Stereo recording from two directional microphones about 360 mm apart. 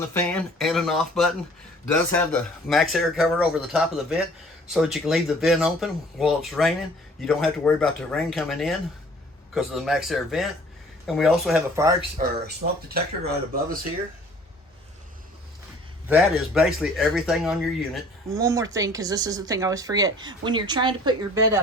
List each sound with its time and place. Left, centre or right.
0.1 s speech: centre
12.1 s speech: right
16.0 s speech: centre